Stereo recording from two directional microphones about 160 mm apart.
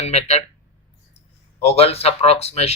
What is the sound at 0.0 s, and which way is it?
Speech, 45° left (ahead or behind).